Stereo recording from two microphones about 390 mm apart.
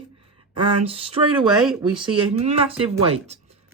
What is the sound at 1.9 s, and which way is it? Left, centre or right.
Speech, centre.